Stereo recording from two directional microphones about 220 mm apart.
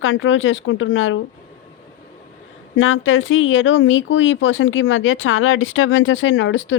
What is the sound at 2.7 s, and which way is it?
Speech, 65° left (ahead or behind).